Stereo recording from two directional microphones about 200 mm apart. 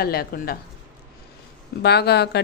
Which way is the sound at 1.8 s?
55° left (ahead or behind).